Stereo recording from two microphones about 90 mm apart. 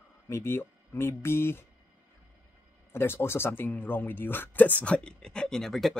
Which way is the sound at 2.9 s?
25° left (ahead or behind).